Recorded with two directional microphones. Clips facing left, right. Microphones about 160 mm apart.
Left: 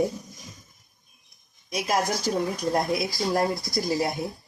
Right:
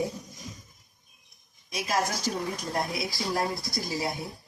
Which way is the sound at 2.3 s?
50° left (ahead or behind).